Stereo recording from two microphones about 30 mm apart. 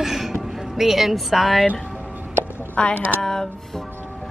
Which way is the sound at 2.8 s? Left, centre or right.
Left.